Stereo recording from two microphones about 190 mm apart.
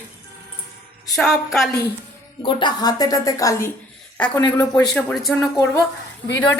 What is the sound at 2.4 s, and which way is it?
Speech, 25° left (ahead or behind).